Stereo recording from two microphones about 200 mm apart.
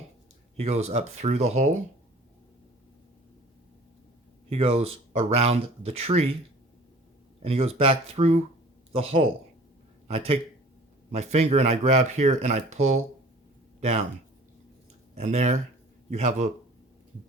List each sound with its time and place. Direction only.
0.5 s speech: 30° right (ahead or behind)
4.4 s speech: 30° right (ahead or behind)
7.4 s speech: 30° right (ahead or behind)
15.1 s speech: 35° right (ahead or behind)